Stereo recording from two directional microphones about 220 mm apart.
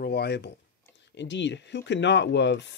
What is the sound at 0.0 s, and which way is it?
Speech, 45° left (ahead or behind).